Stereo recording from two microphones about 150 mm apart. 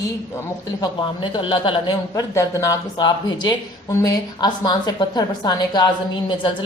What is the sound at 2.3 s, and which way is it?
A woman's voice, 20° left (ahead or behind).